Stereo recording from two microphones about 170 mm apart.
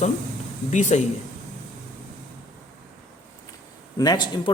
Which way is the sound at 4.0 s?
25° left (ahead or behind).